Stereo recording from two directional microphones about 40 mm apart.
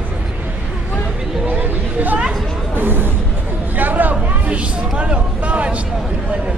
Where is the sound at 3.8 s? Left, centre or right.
Right.